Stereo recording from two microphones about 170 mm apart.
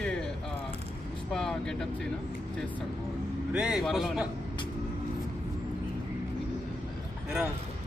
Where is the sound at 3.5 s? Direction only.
5° right (ahead or behind).